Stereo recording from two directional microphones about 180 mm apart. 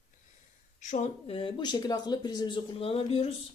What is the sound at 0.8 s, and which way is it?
Speech, 40° left (ahead or behind).